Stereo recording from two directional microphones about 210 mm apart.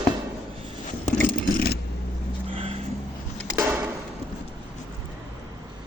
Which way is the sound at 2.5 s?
25° right (ahead or behind).